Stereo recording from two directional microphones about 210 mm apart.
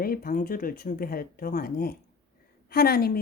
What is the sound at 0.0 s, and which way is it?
Speech, 45° left (ahead or behind).